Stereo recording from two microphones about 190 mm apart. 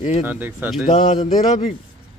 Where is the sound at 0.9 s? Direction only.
40° left (ahead or behind).